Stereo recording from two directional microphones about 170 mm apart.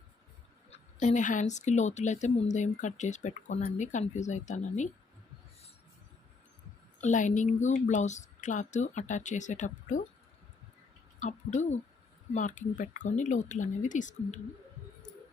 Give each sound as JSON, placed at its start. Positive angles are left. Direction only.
{"t": 0.7, "sound": "speech", "side_deg": 45}
{"t": 7.0, "sound": "speech", "side_deg": 45}
{"t": 11.2, "sound": "speech", "side_deg": 45}